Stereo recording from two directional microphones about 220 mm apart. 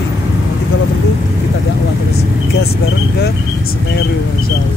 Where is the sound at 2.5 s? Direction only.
45° left (ahead or behind).